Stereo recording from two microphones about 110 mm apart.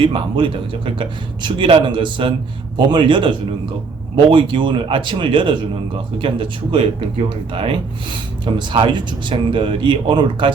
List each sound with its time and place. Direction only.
0.0 s speech: 50° right (ahead or behind)